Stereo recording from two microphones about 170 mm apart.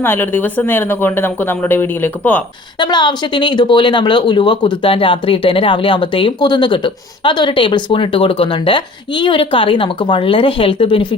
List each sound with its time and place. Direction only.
0.0 s speech: 10° left (ahead or behind)
2.8 s speech: 25° left (ahead or behind)